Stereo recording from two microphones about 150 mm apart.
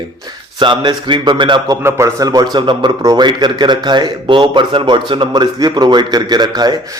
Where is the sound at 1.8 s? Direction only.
20° right (ahead or behind).